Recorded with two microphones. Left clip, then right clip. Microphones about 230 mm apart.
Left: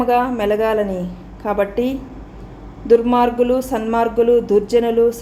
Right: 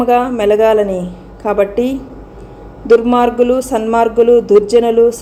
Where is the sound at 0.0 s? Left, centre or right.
Centre.